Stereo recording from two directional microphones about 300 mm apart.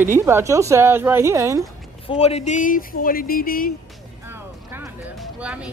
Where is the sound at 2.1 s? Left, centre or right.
Centre.